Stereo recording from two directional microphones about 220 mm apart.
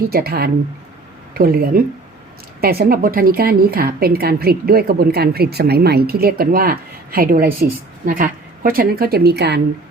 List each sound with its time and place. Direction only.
0.1 s a woman's voice: 45° right (ahead or behind)